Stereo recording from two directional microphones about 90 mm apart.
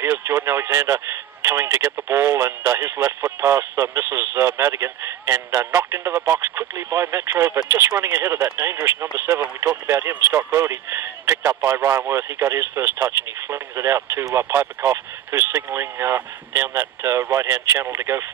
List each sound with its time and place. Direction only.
0.0 s speech: 30° right (ahead or behind)